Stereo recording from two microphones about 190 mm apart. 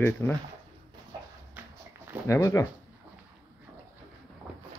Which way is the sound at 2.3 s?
15° left (ahead or behind).